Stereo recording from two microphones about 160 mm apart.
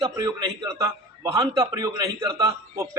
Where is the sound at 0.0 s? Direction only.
25° right (ahead or behind).